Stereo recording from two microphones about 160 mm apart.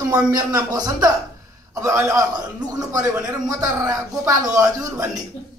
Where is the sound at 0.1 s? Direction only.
20° right (ahead or behind).